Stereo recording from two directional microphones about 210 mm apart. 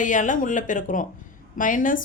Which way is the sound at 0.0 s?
40° left (ahead or behind).